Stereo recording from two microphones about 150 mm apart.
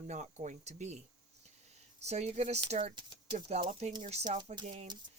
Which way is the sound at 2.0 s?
45° right (ahead or behind).